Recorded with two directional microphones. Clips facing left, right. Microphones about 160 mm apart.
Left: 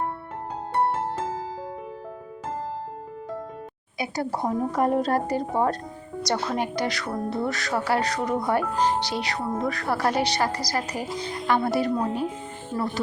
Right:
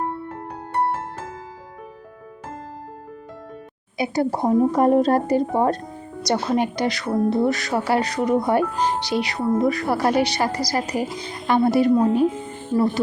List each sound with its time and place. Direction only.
3.9 s speech: 20° right (ahead or behind)